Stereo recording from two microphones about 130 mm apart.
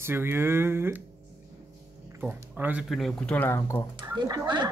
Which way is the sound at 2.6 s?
10° right (ahead or behind).